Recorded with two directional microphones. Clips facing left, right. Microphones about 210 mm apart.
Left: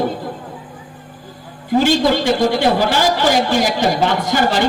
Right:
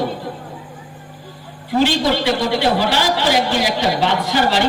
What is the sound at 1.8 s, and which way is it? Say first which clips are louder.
A woman's voice: left 2 dB; 45° left (ahead or behind).